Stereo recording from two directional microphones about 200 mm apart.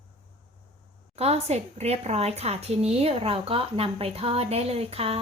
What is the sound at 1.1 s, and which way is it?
A woman's voice, 30° right (ahead or behind).